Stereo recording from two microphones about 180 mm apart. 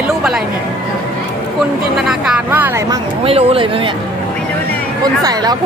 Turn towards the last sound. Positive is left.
turn(degrees=-20)  # may be behind; listen again after turning